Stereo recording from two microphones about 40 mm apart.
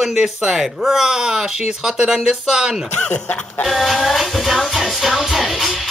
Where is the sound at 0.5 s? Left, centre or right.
Centre.